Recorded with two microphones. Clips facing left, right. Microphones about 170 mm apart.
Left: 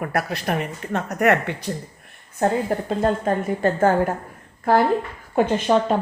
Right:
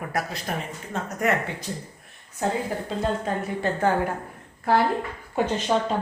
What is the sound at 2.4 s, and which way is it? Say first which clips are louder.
Speech: left 5 dB; 60° left (ahead or behind).